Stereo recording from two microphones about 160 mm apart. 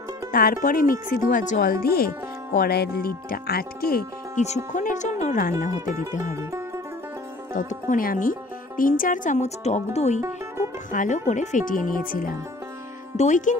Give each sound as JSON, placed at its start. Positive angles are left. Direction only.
{"t": 0.3, "sound": "speech", "side_deg": 65}
{"t": 4.4, "sound": "speech", "side_deg": 50}
{"t": 7.5, "sound": "speech", "side_deg": 60}
{"t": 13.1, "sound": "speech", "side_deg": 50}